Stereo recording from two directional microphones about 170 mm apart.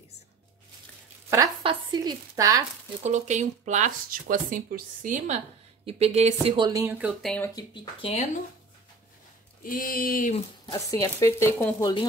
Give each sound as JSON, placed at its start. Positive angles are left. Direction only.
{"t": 1.6, "sound": "speech", "side_deg": -30}
{"t": 3.0, "sound": "speech", "side_deg": -45}
{"t": 7.0, "sound": "speech", "side_deg": 5}
{"t": 7.5, "sound": "speech", "side_deg": 30}
{"t": 9.6, "sound": "speech", "side_deg": 55}
{"t": 10.7, "sound": "speech", "side_deg": 20}